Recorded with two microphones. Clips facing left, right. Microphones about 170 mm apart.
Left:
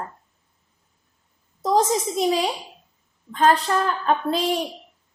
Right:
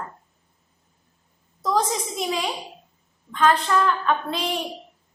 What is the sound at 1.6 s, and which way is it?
Speech, 30° left (ahead or behind).